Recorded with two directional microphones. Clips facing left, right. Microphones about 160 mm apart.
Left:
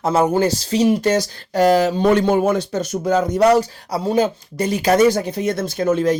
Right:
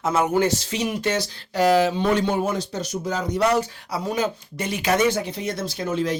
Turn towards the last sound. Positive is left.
turn(degrees=45)  # may be behind; listen again after turning